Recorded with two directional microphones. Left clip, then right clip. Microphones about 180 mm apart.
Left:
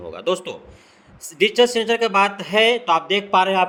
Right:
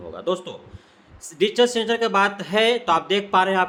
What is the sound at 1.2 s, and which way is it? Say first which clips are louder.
Speech: left 3 dB; 30° left (ahead or behind).